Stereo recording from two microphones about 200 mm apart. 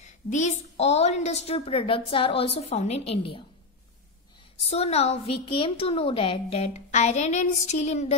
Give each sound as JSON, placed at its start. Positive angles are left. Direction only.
{"t": 0.0, "sound": "a woman's voice", "side_deg": 35}
{"t": 4.6, "sound": "a woman's voice", "side_deg": 30}